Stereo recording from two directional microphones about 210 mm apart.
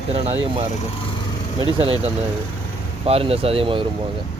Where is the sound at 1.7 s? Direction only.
25° right (ahead or behind).